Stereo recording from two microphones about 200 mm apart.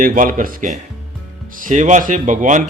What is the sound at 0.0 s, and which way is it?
A man's voice, 45° right (ahead or behind).